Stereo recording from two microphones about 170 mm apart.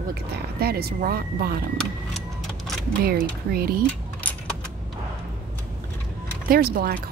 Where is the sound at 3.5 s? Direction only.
60° right (ahead or behind).